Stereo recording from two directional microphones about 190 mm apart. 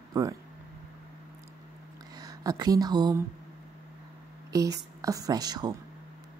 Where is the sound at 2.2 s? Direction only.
20° right (ahead or behind).